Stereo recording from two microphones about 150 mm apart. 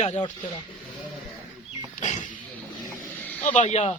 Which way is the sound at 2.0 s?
55° left (ahead or behind).